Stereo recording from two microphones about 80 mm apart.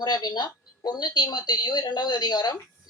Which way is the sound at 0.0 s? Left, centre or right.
Left.